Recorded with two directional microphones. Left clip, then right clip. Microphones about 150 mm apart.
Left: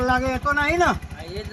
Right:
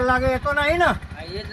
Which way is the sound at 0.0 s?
25° right (ahead or behind).